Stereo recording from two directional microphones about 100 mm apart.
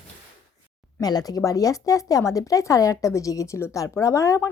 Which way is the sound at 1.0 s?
40° left (ahead or behind).